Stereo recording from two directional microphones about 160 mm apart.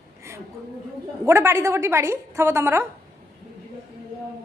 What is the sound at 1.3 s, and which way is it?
A woman's voice, 15° right (ahead or behind).